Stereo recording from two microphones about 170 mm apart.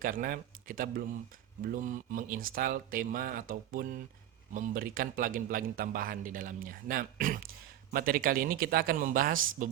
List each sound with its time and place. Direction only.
0.0 s a man's voice: 55° right (ahead or behind)